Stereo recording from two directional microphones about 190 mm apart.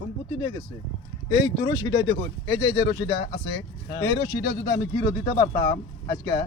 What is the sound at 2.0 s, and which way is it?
Speech, 70° left (ahead or behind).